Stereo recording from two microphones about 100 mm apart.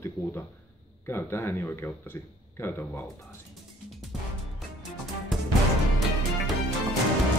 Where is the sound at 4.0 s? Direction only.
Centre (ahead or behind).